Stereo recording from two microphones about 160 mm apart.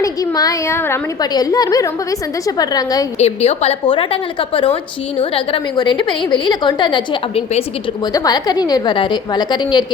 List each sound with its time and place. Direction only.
0.0 s a woman's voice: 20° left (ahead or behind)
3.2 s a woman's voice: 40° left (ahead or behind)
8.0 s a woman's voice: 25° left (ahead or behind)